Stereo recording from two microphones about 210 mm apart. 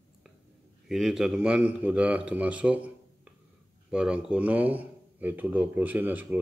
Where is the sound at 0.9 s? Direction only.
Centre (ahead or behind).